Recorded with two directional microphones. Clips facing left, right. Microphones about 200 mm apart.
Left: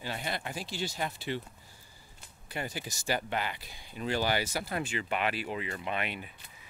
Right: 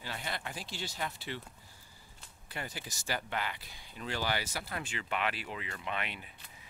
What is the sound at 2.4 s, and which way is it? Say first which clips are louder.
Speech: left 5 dB; 15° left (ahead or behind).